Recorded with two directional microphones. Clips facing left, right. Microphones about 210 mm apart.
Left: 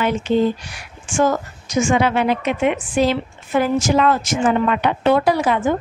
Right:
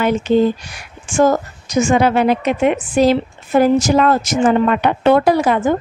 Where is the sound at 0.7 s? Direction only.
40° right (ahead or behind).